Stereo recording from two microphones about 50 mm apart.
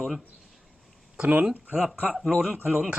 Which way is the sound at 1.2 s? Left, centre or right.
Right.